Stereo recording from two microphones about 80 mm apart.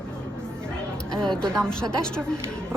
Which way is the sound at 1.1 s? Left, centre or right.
Centre.